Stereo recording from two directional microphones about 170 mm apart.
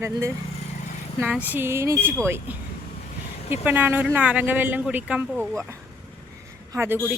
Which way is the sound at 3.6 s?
10° right (ahead or behind).